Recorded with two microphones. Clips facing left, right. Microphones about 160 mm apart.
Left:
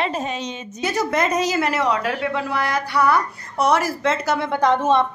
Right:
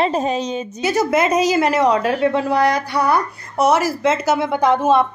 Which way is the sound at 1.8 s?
35° right (ahead or behind).